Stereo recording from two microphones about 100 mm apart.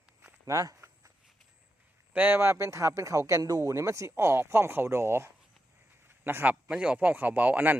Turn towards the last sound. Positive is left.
turn(degrees=-15)  # may be behind; listen again after turning